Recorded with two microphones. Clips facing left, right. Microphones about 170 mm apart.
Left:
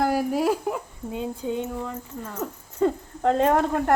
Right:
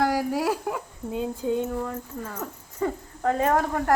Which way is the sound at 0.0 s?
25° left (ahead or behind).